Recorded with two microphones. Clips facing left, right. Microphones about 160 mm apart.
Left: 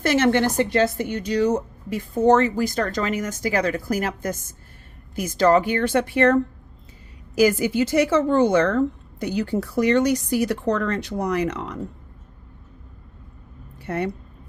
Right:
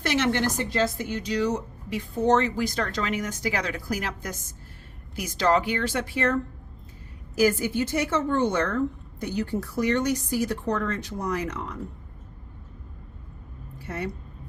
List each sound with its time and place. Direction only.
0.0 s speech: 50° left (ahead or behind); by 6.4 s 65° left (ahead or behind)
7.3 s a woman's voice: 90° left
13.7 s a sound: 60° left (ahead or behind)